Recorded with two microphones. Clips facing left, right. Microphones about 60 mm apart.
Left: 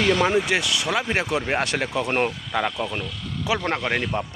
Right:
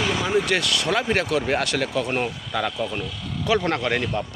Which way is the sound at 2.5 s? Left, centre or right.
Centre.